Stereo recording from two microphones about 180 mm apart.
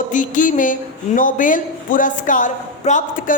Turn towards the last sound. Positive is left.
turn(degrees=45)  # may be behind; listen again after turning